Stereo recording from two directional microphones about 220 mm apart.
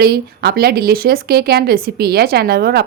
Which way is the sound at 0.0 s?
45° right (ahead or behind).